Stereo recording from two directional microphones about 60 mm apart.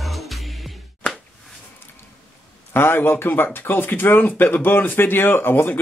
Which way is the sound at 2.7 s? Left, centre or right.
Left.